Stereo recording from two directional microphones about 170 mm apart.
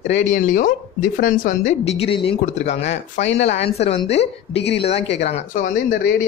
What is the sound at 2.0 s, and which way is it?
Speech, 35° left (ahead or behind).